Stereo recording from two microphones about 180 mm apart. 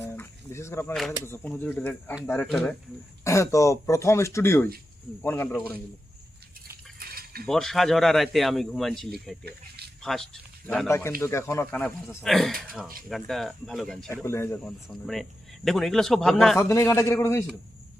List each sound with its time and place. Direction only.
0.0 s a sound: 15° left (ahead or behind)
1.1 s speech: 15° left (ahead or behind)
3.2 s speech: 15° left (ahead or behind)
7.0 s a sound: 55° right (ahead or behind)
7.4 s speech: centre (ahead or behind)
9.4 s speech: 65° right (ahead or behind)
10.0 s speech: centre (ahead or behind)
10.8 s speech: 15° left (ahead or behind)
14.1 s speech: 15° left (ahead or behind)
14.8 s speech: centre (ahead or behind)
16.6 s speech: 15° left (ahead or behind)